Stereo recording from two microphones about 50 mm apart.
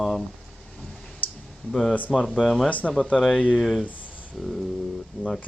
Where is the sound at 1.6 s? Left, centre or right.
Left.